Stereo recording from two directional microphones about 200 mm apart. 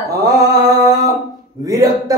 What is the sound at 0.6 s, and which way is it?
Mantra, 20° right (ahead or behind).